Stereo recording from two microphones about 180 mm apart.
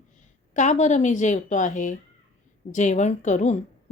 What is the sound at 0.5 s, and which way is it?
A woman's voice, 40° left (ahead or behind).